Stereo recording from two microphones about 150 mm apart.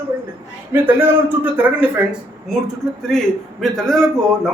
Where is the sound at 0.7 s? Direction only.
15° right (ahead or behind).